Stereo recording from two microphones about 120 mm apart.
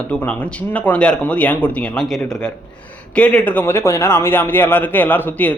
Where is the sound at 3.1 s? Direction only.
10° left (ahead or behind).